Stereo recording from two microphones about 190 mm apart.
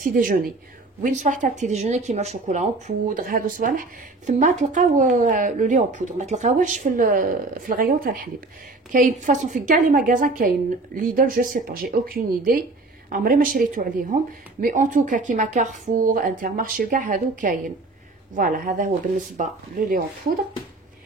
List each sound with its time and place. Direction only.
0.0 s speech: 45° right (ahead or behind)